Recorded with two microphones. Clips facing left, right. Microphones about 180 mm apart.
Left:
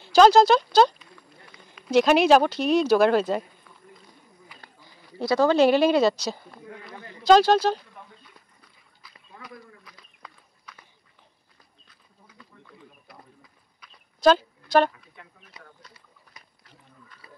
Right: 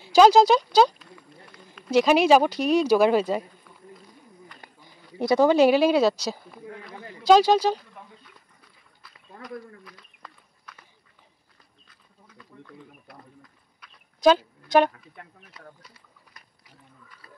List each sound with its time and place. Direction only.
0.0 s speech: 10° right (ahead or behind)
4.6 s speech: 15° right (ahead or behind)
9.4 s livestock: centre (ahead or behind)
12.6 s a sound: centre (ahead or behind)
14.2 s a woman's voice: 15° right (ahead or behind)
15.2 s speech: 50° right (ahead or behind)